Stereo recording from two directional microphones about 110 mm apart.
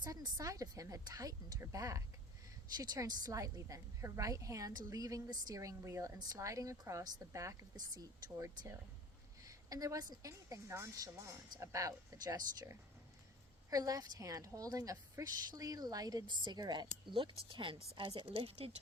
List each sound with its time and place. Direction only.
0.0 s a woman's voice: 30° right (ahead or behind)
17.1 s a woman's voice: 50° right (ahead or behind)